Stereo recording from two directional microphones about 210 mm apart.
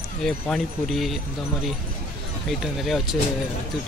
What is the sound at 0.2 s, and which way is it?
Speech, centre (ahead or behind).